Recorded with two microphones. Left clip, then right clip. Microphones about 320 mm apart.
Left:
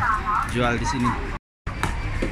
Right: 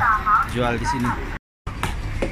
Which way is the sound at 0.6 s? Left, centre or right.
Centre.